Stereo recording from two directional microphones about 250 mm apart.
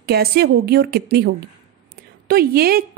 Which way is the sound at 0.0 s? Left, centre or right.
Right.